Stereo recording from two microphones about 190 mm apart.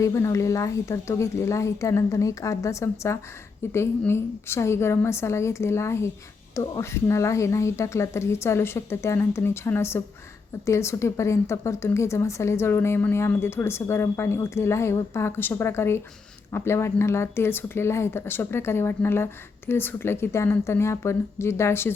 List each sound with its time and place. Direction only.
0.0 s speech: 15° left (ahead or behind)